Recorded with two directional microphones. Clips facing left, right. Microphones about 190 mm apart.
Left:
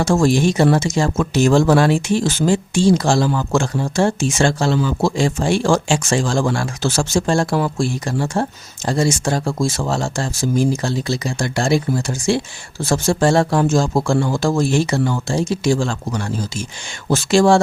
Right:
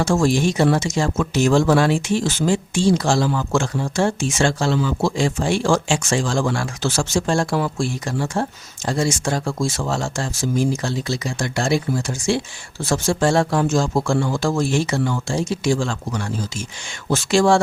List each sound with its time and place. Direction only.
0.0 s speech: 40° left (ahead or behind)